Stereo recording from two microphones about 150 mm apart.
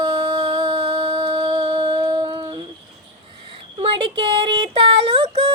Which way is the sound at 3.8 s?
35° right (ahead or behind).